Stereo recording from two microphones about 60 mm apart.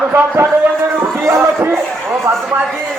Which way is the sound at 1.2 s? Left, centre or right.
Right.